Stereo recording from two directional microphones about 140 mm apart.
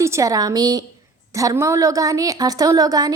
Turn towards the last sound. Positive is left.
turn(degrees=-25)  # may be behind; listen again after turning